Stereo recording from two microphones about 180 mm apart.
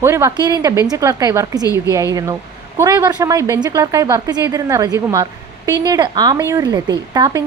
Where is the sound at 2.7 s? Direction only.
20° right (ahead or behind).